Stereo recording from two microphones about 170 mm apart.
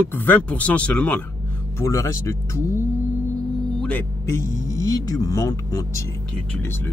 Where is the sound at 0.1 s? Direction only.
10° left (ahead or behind).